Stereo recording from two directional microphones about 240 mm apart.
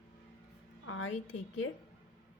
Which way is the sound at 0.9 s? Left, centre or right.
Left.